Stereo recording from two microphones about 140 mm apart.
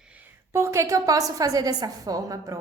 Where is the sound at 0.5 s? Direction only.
20° right (ahead or behind).